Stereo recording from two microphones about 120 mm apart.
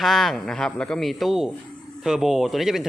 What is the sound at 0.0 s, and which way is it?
Speech, centre (ahead or behind).